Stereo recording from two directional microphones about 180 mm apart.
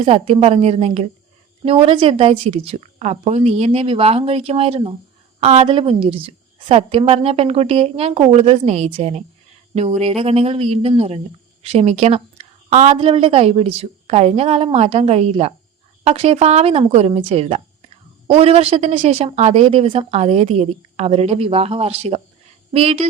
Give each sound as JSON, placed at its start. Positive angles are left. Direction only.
{"t": 0.0, "sound": "speech", "side_deg": -35}